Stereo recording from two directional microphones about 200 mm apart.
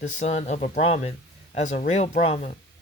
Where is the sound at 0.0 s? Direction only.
35° left (ahead or behind).